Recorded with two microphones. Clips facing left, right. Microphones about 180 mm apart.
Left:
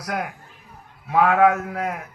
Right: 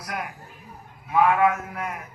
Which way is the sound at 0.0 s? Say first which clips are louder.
Left 5 dB; 80° left.